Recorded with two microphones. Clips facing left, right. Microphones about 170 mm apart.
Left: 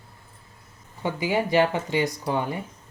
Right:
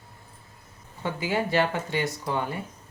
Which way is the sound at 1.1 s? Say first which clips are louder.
Left 3 dB; 15° left (ahead or behind).